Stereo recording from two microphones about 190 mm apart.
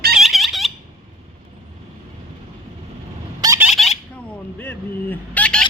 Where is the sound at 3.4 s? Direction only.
15° right (ahead or behind).